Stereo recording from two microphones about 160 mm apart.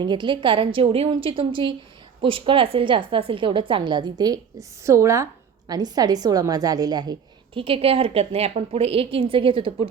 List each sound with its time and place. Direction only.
0.0 s a woman's voice: 30° right (ahead or behind)